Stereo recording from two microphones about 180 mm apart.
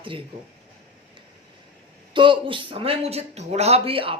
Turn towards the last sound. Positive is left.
turn(degrees=-30)  # may be behind; listen again after turning